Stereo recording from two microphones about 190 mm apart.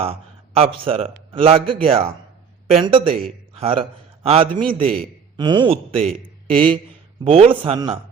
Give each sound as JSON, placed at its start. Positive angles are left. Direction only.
{"t": 0.0, "sound": "a man's voice", "side_deg": -30}